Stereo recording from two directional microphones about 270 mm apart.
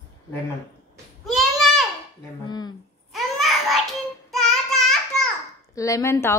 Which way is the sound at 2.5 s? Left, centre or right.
Centre.